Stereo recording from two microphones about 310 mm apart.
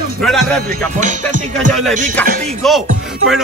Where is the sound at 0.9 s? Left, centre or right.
Right.